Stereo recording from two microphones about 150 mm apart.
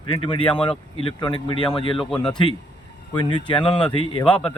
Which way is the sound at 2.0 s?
5° left (ahead or behind).